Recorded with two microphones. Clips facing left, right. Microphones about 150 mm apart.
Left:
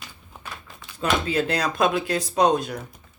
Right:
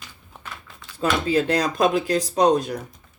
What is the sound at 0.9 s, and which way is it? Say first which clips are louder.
Speech: right 2 dB; 35° right (ahead or behind).